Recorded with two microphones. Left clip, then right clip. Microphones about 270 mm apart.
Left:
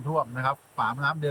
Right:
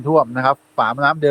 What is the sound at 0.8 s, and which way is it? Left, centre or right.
Speech, centre.